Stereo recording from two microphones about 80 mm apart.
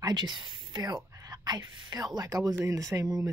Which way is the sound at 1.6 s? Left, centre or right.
Right.